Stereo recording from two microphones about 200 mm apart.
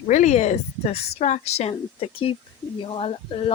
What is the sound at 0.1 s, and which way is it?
Speech, 35° left (ahead or behind).